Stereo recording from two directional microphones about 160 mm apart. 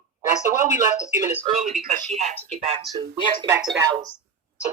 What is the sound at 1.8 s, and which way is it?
Speech, 45° right (ahead or behind).